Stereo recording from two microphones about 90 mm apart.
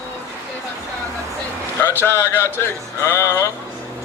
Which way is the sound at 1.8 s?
25° left (ahead or behind).